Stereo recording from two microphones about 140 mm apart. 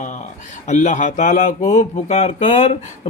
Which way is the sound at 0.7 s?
60° left (ahead or behind).